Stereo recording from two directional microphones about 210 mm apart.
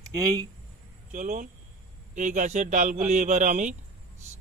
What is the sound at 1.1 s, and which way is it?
Speech, 35° right (ahead or behind).